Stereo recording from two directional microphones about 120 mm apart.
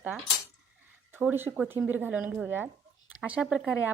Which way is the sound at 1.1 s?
15° right (ahead or behind).